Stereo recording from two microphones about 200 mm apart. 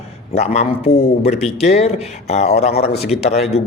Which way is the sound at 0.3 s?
35° left (ahead or behind).